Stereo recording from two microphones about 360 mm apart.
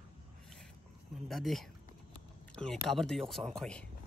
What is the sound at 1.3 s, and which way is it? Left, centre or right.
Speech, centre.